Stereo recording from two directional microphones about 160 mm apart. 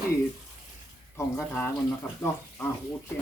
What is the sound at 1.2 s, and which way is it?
Speech, 15° left (ahead or behind).